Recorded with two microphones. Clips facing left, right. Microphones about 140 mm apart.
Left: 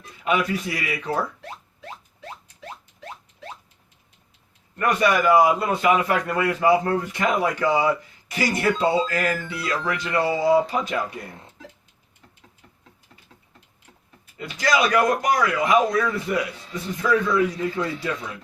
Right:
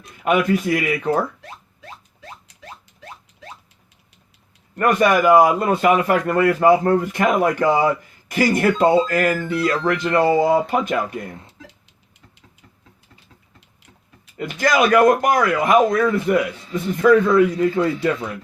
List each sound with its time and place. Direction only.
0.0 s a man's voice: 55° right (ahead or behind)
4.8 s a man's voice: 50° right (ahead or behind)
14.3 s a man's voice: 55° right (ahead or behind)